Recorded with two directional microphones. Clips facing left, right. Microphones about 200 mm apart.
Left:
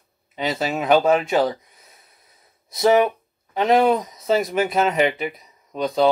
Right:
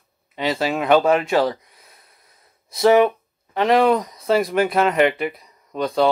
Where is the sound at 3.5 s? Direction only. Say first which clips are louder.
Right 1 dB; centre (ahead or behind).